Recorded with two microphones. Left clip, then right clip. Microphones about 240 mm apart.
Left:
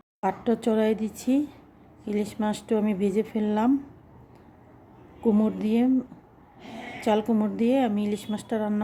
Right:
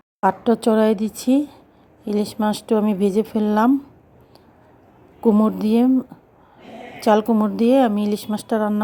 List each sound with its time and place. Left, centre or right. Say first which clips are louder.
0.2 s a woman's voice: right 8 dB; right
5.2 s a woman's voice: right 7 dB; right
7.0 s a woman's voice: right 8 dB; right